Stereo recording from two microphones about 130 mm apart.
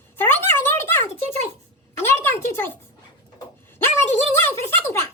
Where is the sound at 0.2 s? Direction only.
15° left (ahead or behind).